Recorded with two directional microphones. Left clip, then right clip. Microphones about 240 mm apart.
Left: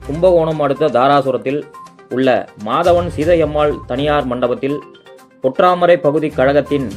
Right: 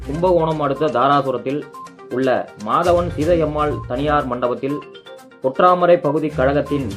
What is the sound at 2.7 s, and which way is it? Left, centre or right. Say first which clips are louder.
Speech: left 3 dB; left.